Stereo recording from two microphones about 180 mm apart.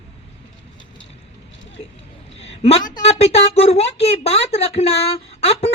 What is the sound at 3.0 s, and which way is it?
A man's voice, 35° left (ahead or behind).